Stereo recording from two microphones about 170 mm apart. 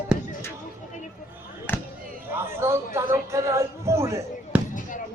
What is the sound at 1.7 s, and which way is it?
Basketball bounce, 10° left (ahead or behind).